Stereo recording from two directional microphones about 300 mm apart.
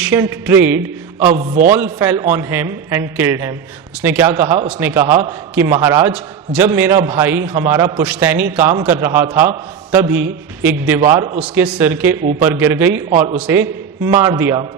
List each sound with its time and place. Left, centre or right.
0.0 s a man's voice: centre
1.3 s a man's voice: right
1.7 s a man's voice: centre
13.1 s a man's voice: right
13.4 s a man's voice: centre